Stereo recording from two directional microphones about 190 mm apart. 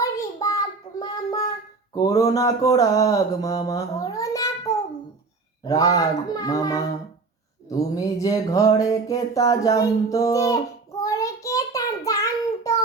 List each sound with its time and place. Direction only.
0.0 s child singing: 15° left (ahead or behind)
2.0 s music: 20° left (ahead or behind)
5.6 s a child's voice: 20° left (ahead or behind)
7.7 s music: 20° left (ahead or behind)
11.0 s child singing: 15° left (ahead or behind)